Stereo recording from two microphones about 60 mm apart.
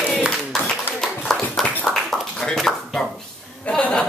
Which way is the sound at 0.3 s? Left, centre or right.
Centre.